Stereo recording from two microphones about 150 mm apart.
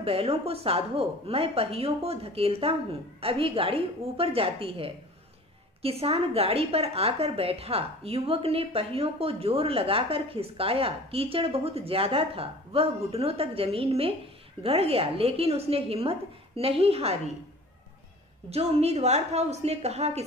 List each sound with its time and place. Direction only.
0.0 s a woman's voice: 40° right (ahead or behind)
18.5 s a woman's voice: 45° right (ahead or behind)